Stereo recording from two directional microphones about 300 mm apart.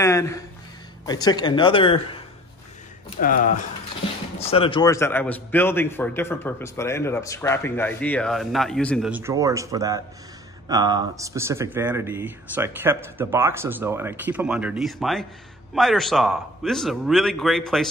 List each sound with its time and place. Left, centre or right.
0.0 s a man's voice: centre
3.2 s a man's voice: left; by 17.8 s centre